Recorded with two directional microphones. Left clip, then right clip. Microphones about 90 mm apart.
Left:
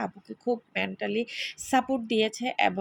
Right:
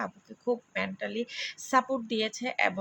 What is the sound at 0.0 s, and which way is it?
A woman's voice, 35° left (ahead or behind).